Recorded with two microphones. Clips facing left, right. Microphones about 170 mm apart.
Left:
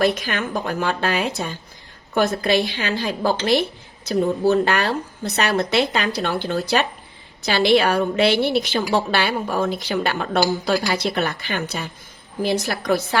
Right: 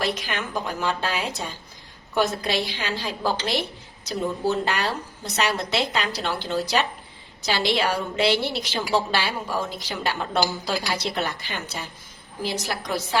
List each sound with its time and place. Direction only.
0.0 s a woman's voice: 55° left (ahead or behind)